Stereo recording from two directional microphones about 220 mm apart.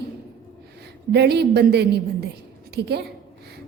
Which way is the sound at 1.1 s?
50° right (ahead or behind).